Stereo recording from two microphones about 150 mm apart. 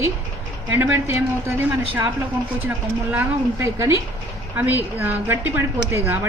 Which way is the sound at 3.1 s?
15° right (ahead or behind).